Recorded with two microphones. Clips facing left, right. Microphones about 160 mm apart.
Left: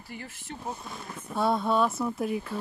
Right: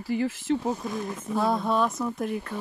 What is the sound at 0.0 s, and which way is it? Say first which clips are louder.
Speech: right 15 dB; 90° right.